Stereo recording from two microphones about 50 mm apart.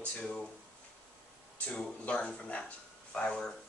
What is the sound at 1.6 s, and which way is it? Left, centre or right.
Speech, left.